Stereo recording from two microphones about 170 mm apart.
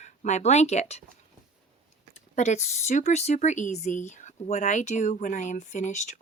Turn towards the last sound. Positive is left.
turn(degrees=45)  # may be behind; listen again after turning